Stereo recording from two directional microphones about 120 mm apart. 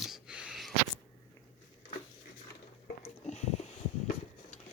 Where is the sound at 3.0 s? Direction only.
65° left (ahead or behind).